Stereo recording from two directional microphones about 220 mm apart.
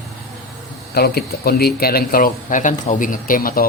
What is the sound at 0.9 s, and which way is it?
Speech, 45° left (ahead or behind).